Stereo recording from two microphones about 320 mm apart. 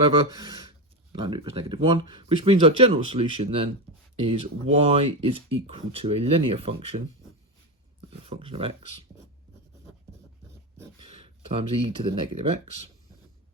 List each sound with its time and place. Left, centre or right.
0.0 s speech: centre
4.7 s speech: centre
8.2 s speech: centre
10.8 s speech: centre